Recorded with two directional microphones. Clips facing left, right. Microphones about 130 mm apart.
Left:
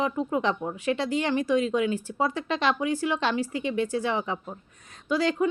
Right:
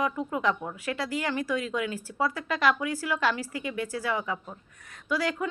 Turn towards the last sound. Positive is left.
turn(degrees=25)  # may be behind; listen again after turning